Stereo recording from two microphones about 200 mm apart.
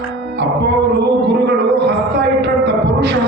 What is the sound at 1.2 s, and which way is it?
A man's voice, 60° right (ahead or behind).